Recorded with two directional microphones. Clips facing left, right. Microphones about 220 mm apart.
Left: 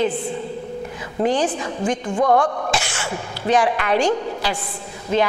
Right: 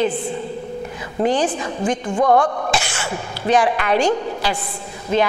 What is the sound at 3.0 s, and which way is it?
A woman's voice, 15° right (ahead or behind).